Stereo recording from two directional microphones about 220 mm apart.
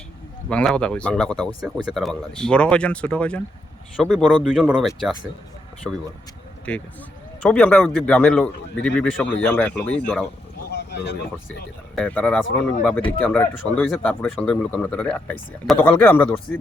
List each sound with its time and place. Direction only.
0.5 s speech: 5° left (ahead or behind)
6.7 s speech: 5° left (ahead or behind)
10.7 s speech: 50° left (ahead or behind)
11.9 s speech: 5° left (ahead or behind)